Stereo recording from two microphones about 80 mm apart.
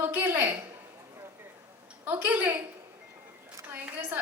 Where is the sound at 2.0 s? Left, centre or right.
Right.